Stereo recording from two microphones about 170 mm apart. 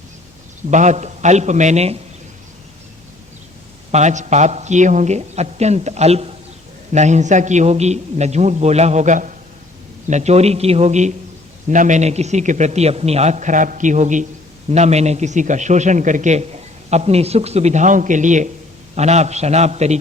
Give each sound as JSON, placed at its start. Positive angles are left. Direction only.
{"t": 0.7, "sound": "a man's voice", "side_deg": -45}
{"t": 3.9, "sound": "a man's voice", "side_deg": -45}